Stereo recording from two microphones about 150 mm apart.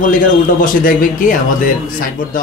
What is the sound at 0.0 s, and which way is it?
Speech, 65° left (ahead or behind).